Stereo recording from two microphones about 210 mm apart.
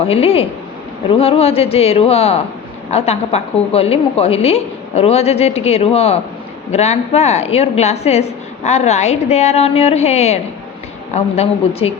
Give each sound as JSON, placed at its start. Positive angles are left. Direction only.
{"t": 0.0, "sound": "a woman's voice", "side_deg": 30}